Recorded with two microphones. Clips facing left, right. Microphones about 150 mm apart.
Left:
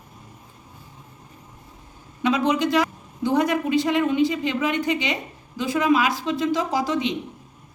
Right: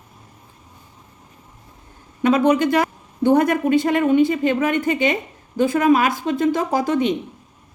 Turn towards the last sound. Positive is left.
turn(degrees=-50)  # may be behind; listen again after turning